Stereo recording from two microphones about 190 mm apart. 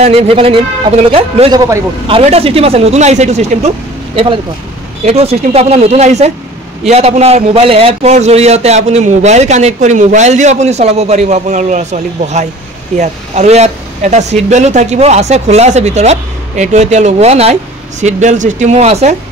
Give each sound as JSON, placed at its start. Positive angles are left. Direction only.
{"t": 0.0, "sound": "a man's voice", "side_deg": -30}